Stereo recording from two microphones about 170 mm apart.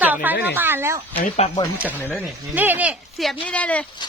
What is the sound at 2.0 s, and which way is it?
Speech, 10° left (ahead or behind).